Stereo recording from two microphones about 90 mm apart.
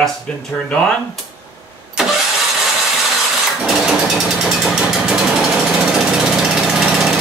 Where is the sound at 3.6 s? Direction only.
5° right (ahead or behind).